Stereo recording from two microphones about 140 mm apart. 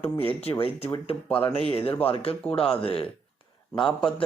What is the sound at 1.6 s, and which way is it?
Speech, 45° left (ahead or behind).